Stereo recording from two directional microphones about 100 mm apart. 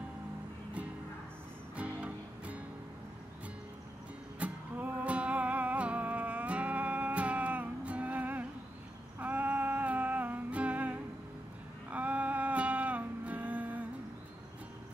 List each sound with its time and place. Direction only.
1.8 s music: 15° right (ahead or behind)
4.4 s music: 15° right (ahead or behind)